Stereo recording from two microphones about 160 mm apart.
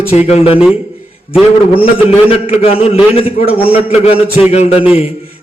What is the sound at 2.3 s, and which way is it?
A man's voice, 35° left (ahead or behind).